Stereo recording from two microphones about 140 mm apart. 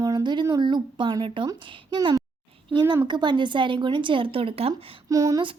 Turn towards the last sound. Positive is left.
turn(degrees=-25)  # may be behind; listen again after turning